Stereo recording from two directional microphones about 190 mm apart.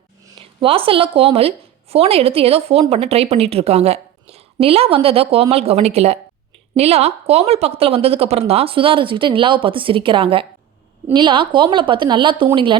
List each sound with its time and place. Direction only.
0.3 s a woman's voice: 30° right (ahead or behind)